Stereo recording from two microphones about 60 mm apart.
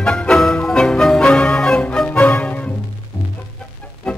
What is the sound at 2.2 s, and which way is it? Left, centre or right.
Music, left.